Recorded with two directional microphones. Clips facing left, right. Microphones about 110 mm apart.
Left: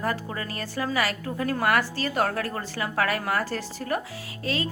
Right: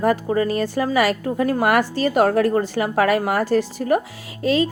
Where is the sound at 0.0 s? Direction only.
20° right (ahead or behind).